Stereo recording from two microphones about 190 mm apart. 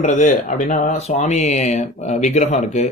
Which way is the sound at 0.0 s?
40° left (ahead or behind).